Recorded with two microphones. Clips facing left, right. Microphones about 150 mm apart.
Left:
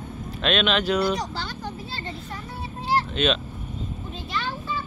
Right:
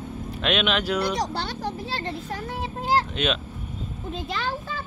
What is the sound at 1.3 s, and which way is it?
Music, 65° right (ahead or behind).